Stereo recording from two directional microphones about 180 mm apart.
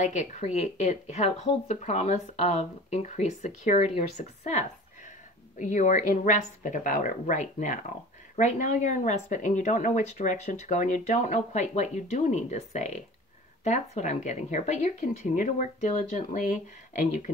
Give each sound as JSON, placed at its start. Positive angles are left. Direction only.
{"t": 0.0, "sound": "speech", "side_deg": 40}